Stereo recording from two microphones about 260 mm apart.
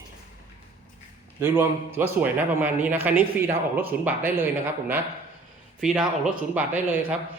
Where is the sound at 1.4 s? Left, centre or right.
Centre.